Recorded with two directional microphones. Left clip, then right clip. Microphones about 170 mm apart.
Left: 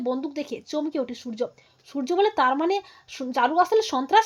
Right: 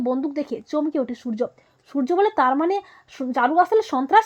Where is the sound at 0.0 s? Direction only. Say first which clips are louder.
Right 4 dB; 30° right (ahead or behind).